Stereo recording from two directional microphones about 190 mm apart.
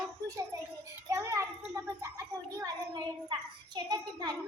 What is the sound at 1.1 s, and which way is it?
A child's voice, 15° right (ahead or behind).